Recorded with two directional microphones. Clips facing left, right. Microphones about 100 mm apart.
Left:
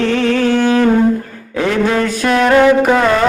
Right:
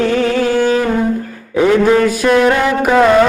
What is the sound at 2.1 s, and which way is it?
Mantra, 10° right (ahead or behind).